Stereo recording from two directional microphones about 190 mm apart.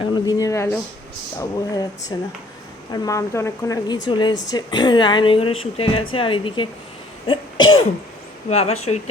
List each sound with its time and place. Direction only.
0.0 s speech: 20° left (ahead or behind)
7.3 s cough: 25° left (ahead or behind)
8.4 s speech: 35° left (ahead or behind)